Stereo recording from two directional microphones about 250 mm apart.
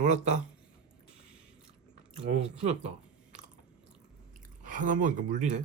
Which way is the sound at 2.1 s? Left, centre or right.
Right.